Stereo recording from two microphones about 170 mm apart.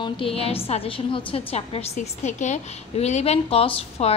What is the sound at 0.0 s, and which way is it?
A woman's voice, 35° left (ahead or behind).